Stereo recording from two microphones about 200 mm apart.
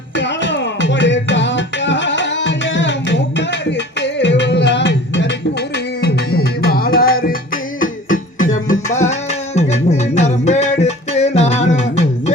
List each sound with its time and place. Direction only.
0.2 s music: 65° left (ahead or behind); by 12.3 s 35° left (ahead or behind)